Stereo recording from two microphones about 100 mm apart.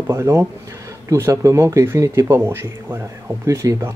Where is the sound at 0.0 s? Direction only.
25° right (ahead or behind).